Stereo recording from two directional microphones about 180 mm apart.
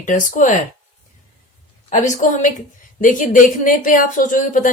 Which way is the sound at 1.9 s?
45° left (ahead or behind).